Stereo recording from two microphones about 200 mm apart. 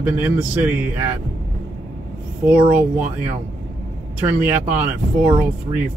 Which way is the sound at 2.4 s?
10° right (ahead or behind).